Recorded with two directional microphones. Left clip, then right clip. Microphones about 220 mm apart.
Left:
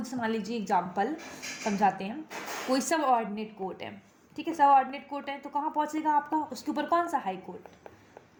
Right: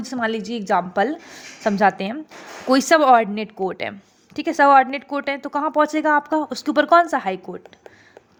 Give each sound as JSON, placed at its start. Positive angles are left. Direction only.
{"t": 0.0, "sound": "speech", "side_deg": -35}